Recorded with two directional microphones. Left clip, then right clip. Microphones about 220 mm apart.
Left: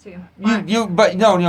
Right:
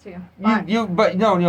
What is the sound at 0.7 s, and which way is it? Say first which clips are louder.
Speech: left 6 dB; 45° left (ahead or behind).